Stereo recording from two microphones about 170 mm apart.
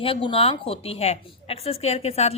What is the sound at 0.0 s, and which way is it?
A woman's voice, 30° left (ahead or behind).